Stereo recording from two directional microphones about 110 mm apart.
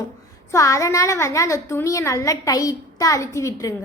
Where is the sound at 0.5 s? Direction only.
30° left (ahead or behind).